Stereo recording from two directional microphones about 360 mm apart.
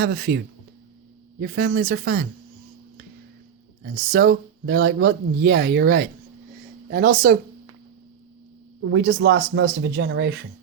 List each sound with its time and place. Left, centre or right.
0.0 s speech: right
1.4 s speech: right
3.8 s speech: right
8.8 s speech: right